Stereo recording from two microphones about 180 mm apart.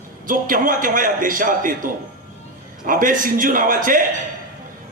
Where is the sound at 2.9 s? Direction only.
50° right (ahead or behind).